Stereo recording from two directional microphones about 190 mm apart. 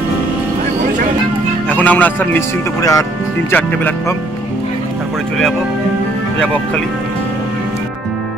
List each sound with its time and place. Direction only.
1.7 s speech: 10° left (ahead or behind)